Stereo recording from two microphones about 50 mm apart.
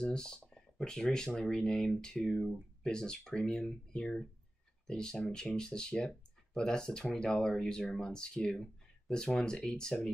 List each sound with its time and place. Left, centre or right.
0.0 s speech: centre